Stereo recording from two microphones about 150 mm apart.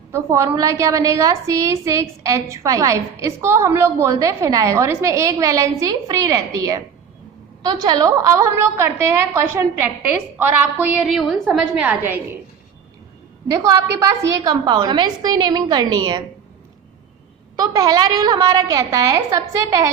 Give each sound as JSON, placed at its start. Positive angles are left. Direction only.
{"t": 0.1, "sound": "a woman's voice", "side_deg": -20}
{"t": 11.1, "sound": "a woman's voice", "side_deg": 0}
{"t": 13.6, "sound": "a woman's voice", "side_deg": -25}
{"t": 17.6, "sound": "a woman's voice", "side_deg": -25}